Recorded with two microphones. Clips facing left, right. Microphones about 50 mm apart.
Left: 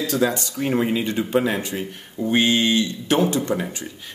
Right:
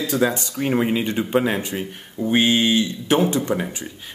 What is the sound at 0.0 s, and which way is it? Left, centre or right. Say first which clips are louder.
Speech: right 1 dB; right.